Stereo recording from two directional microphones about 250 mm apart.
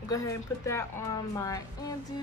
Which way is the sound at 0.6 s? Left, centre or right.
Centre.